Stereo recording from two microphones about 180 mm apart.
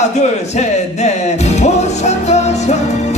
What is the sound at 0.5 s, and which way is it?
Speech, 40° left (ahead or behind).